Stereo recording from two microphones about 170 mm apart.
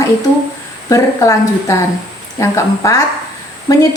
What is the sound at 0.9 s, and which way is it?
A woman's voice, 20° left (ahead or behind).